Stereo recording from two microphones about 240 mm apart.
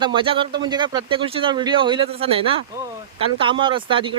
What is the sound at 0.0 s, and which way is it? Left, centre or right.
Speech, right.